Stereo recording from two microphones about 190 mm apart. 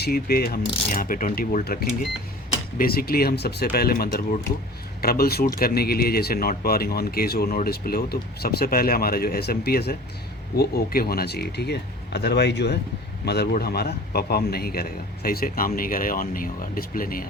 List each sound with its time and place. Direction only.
0.0 s speech: 55° left (ahead or behind)